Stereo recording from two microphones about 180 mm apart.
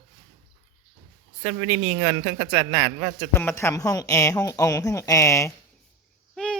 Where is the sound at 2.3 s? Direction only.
15° right (ahead or behind).